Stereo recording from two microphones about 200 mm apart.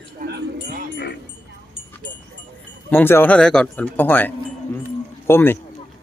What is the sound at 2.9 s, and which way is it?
Speech, 10° left (ahead or behind).